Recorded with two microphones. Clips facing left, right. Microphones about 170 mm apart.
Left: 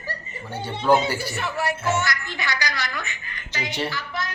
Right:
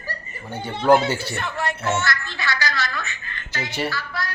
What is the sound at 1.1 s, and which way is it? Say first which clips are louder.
Speech: right 2 dB; 25° right (ahead or behind).